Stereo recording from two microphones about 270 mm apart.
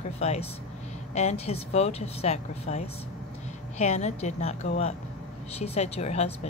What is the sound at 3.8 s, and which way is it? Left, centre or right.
A woman's voice, left.